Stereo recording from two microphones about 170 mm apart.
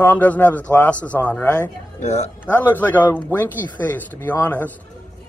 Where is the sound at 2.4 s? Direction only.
10° left (ahead or behind).